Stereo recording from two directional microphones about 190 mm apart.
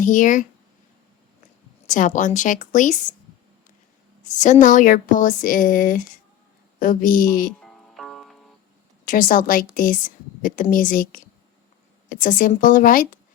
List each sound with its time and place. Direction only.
0.0 s speech: 45° left (ahead or behind)
1.9 s speech: 40° left (ahead or behind)
4.4 s speech: 40° left (ahead or behind)
7.6 s music: centre (ahead or behind)
9.0 s speech: 45° left (ahead or behind)